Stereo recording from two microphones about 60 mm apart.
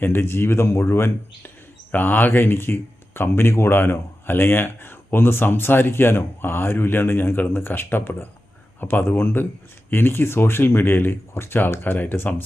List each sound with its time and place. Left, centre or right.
0.0 s speech: left
1.9 s speech: left